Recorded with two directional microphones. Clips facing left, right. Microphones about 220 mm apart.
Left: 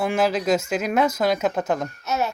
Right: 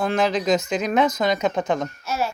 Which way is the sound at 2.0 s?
20° left (ahead or behind).